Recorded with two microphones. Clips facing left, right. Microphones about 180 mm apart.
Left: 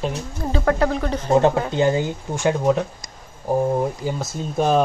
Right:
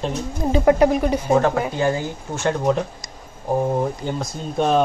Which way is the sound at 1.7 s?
20° left (ahead or behind).